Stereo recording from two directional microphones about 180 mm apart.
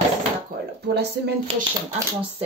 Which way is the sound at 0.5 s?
50° right (ahead or behind).